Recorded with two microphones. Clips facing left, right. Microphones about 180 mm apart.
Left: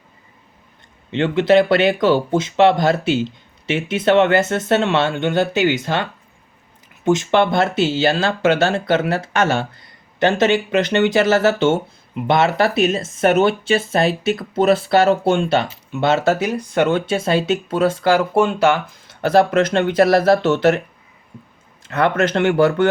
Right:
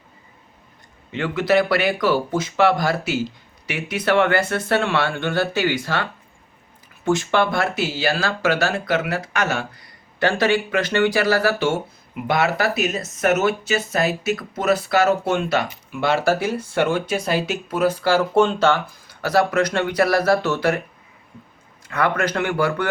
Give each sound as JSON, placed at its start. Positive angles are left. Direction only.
{"t": 1.1, "sound": "speech", "side_deg": 25}
{"t": 19.0, "sound": "speech", "side_deg": 25}
{"t": 21.8, "sound": "speech", "side_deg": 25}